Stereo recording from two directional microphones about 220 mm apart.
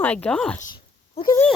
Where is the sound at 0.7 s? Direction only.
20° left (ahead or behind).